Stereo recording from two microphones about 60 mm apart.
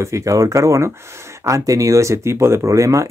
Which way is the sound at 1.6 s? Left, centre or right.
Right.